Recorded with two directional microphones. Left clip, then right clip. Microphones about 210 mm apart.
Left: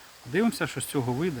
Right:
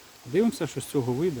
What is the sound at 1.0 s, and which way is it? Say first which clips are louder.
Speech: right 2 dB; 20° left (ahead or behind).